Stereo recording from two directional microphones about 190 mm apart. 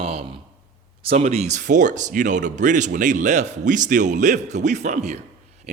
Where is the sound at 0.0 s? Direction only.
30° right (ahead or behind).